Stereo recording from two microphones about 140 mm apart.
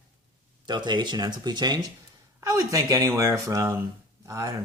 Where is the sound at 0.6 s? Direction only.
30° right (ahead or behind).